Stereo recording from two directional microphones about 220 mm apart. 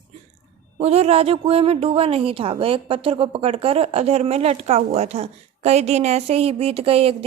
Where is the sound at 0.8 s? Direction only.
30° right (ahead or behind).